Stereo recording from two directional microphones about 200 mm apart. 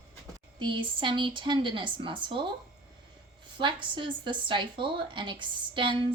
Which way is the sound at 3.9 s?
25° right (ahead or behind).